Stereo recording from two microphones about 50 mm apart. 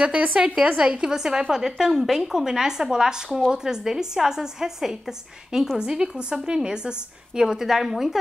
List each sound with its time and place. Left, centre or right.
0.0 s a woman's voice: right